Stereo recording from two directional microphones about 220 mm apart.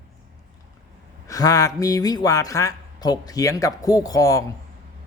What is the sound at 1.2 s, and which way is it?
A man's voice, 15° left (ahead or behind).